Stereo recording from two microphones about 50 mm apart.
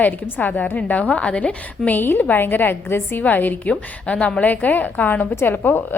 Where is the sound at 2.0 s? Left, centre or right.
Left.